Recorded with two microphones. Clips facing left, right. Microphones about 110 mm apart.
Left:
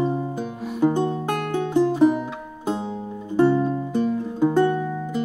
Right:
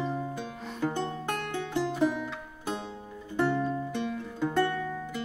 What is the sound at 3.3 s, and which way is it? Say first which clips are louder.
Music: left 9 dB; 20° left (ahead or behind).